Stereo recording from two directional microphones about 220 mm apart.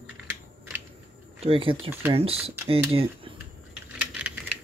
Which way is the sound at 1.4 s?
25° right (ahead or behind).